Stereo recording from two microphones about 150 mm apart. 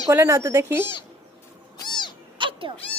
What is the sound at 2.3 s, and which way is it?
Cat, 35° right (ahead or behind).